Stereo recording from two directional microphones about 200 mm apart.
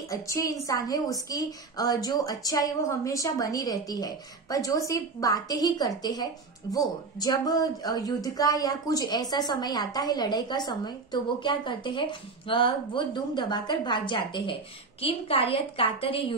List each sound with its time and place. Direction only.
0.1 s a woman's voice: 15° left (ahead or behind)